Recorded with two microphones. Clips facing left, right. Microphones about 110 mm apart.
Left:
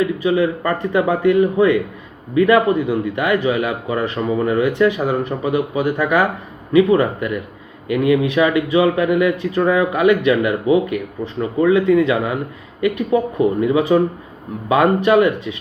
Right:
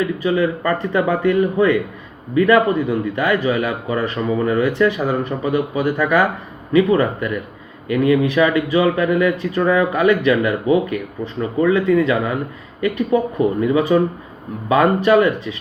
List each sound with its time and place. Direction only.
0.0 s speech: 20° left (ahead or behind)